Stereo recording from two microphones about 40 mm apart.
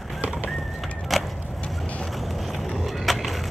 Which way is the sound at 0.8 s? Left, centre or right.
Centre.